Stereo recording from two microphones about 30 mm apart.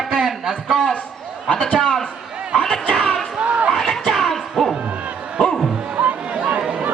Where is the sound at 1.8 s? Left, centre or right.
Left.